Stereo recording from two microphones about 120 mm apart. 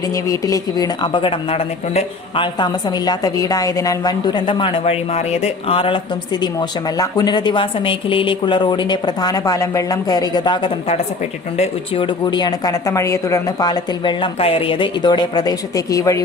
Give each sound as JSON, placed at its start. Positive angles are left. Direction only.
{"t": 0.1, "sound": "a woman's voice", "side_deg": 30}
{"t": 2.3, "sound": "a woman's voice", "side_deg": 40}
{"t": 11.9, "sound": "a woman's voice", "side_deg": 40}